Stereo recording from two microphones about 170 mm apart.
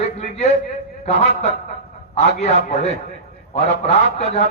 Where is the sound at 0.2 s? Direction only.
40° left (ahead or behind).